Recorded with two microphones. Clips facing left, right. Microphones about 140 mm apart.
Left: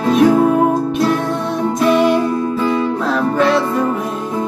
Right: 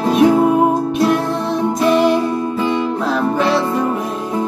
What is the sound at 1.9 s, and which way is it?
Music, centre (ahead or behind).